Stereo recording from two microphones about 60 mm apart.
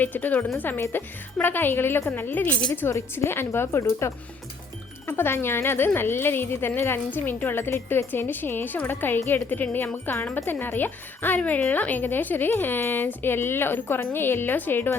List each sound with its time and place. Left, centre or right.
0.0 s a woman's voice: left